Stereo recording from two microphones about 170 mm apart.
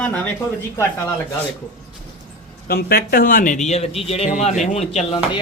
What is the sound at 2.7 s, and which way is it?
Speech, 65° left (ahead or behind).